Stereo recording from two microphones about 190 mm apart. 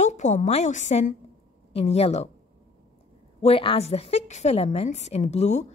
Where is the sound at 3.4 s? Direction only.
30° left (ahead or behind).